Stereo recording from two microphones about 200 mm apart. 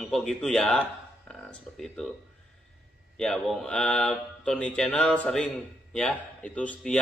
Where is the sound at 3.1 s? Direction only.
5° left (ahead or behind).